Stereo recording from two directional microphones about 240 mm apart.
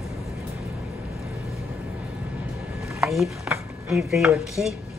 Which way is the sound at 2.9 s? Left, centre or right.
Centre.